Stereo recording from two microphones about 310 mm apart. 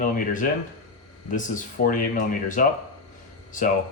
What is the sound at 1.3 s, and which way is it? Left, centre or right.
Speech, left.